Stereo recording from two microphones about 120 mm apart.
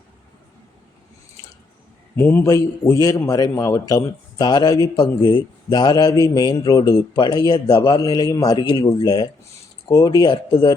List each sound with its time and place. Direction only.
2.1 s a man's voice: 15° left (ahead or behind)
2.5 s a man's voice: 25° left (ahead or behind)